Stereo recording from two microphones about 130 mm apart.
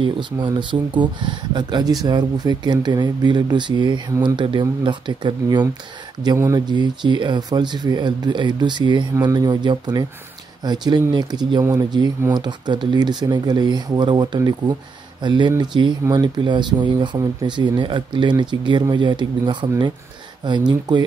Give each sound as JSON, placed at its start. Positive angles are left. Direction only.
{"t": 0.0, "sound": "speech", "side_deg": -35}